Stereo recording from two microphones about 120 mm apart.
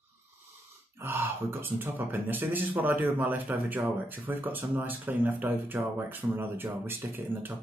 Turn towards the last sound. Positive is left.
turn(degrees=-20)  # may be behind; listen again after turning